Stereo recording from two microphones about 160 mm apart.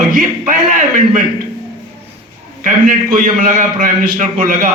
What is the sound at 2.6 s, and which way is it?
Speech, 55° right (ahead or behind).